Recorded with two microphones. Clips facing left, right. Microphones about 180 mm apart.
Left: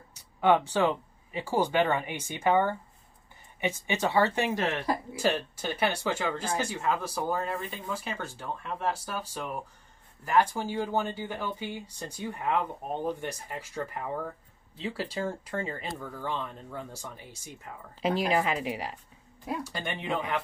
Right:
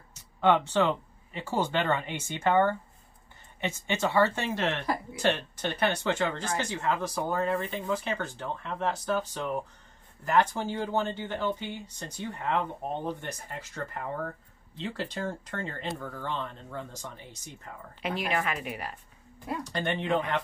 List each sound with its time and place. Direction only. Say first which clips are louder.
0.1 s speech: even; 10° left (ahead or behind)
18.0 s a woman's voice: left 4 dB; 35° left (ahead or behind)
19.4 s speech: right 2 dB; 10° left (ahead or behind)